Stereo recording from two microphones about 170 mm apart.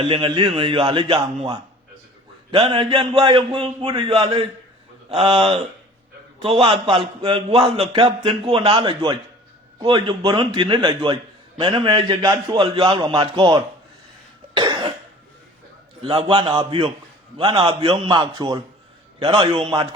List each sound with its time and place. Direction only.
0.0 s a man's voice: 30° right (ahead or behind)
2.5 s a man's voice: 30° right (ahead or behind)
14.5 s cough: 25° right (ahead or behind)
16.0 s a man's voice: 30° right (ahead or behind)